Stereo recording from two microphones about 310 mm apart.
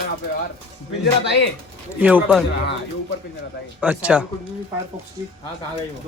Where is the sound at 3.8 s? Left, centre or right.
Centre.